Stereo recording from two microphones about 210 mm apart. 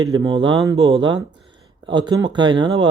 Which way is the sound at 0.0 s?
15° right (ahead or behind).